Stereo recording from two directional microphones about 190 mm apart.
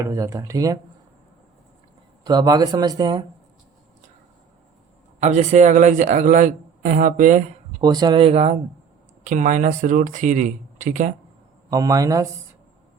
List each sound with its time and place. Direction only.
0.0 s speech: 15° right (ahead or behind)
2.2 s speech: 20° right (ahead or behind)
5.2 s a man's voice: 40° right (ahead or behind)
7.8 s a man's voice: 25° right (ahead or behind); by 11.1 s 40° right (ahead or behind)
11.7 s speech: 20° right (ahead or behind)